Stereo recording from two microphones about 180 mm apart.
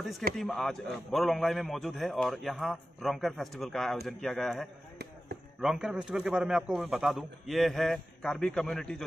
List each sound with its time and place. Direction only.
0.4 s a man's voice: centre (ahead or behind)